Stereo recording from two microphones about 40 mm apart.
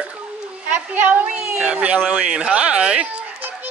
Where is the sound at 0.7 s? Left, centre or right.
Right.